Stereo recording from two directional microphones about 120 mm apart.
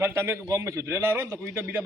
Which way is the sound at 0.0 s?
20° right (ahead or behind).